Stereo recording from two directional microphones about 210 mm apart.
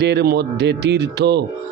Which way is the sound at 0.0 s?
55° right (ahead or behind).